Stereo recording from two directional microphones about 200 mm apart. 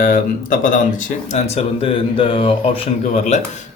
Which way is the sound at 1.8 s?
25° left (ahead or behind).